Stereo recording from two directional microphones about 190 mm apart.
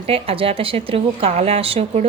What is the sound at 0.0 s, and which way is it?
A woman's voice, 30° right (ahead or behind).